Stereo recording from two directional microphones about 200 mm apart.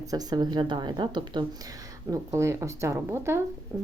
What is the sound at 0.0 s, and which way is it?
Speech, 20° right (ahead or behind).